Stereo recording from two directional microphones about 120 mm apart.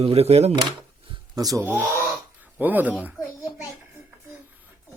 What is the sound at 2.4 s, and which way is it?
Speech, 15° right (ahead or behind).